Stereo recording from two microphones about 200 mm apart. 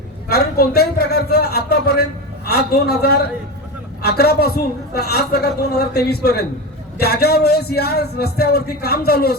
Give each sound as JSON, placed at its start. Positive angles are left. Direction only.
{"t": 0.3, "sound": "a man's voice", "side_deg": 50}